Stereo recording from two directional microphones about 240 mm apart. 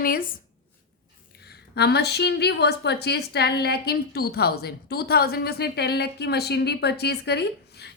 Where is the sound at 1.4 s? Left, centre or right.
Left.